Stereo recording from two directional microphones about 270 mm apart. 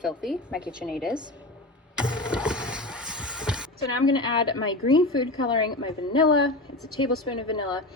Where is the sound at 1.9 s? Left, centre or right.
Centre.